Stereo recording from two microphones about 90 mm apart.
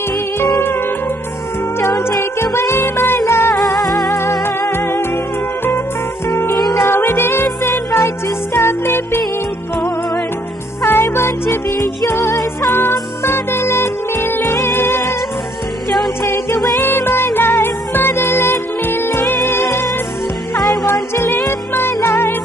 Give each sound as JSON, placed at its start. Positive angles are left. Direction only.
{"t": 1.8, "sound": "music", "side_deg": 30}
{"t": 3.6, "sound": "music", "side_deg": 40}
{"t": 4.1, "sound": "music", "side_deg": 30}
{"t": 6.3, "sound": "music", "side_deg": 30}
{"t": 10.8, "sound": "music", "side_deg": 25}
{"t": 16.8, "sound": "music", "side_deg": 25}